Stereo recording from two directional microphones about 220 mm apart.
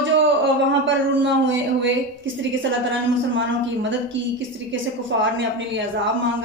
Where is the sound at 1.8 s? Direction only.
60° right (ahead or behind).